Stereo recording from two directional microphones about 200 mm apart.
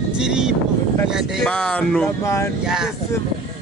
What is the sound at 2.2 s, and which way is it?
Speech, 15° left (ahead or behind).